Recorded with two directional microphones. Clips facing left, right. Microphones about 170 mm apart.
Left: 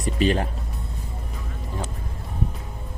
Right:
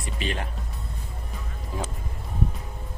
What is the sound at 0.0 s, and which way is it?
Speech, 40° left (ahead or behind).